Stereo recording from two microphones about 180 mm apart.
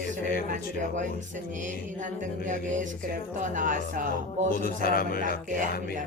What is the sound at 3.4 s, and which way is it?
Speech, 45° right (ahead or behind).